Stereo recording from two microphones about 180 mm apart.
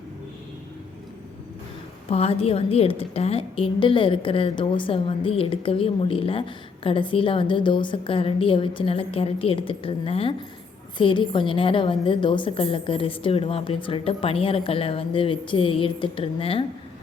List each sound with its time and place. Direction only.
2.0 s a woman's voice: 35° left (ahead or behind)